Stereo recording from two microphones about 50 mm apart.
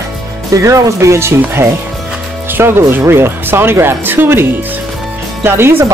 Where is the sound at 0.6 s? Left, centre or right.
Right.